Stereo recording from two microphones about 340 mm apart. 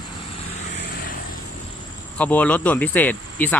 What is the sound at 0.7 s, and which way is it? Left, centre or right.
Vehicle, left.